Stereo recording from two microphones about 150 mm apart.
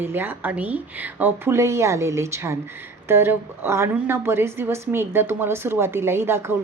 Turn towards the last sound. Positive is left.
turn(degrees=-15)  # may be behind; listen again after turning